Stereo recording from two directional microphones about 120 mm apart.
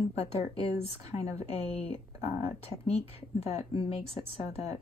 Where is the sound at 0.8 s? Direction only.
55° left (ahead or behind).